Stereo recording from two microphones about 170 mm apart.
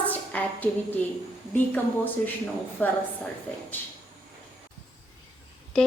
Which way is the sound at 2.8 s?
10° left (ahead or behind).